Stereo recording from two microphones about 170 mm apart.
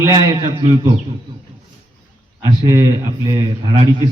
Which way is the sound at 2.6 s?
20° right (ahead or behind).